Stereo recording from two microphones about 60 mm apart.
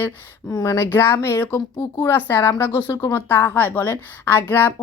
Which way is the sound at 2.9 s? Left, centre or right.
Left.